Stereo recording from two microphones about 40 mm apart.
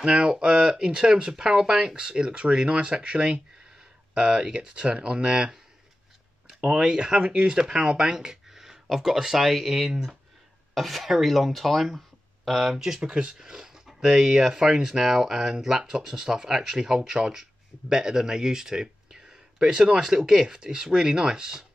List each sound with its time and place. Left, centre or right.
0.0 s speech: right
8.0 s a sound: centre
9.0 s speech: centre
12.7 s speech: centre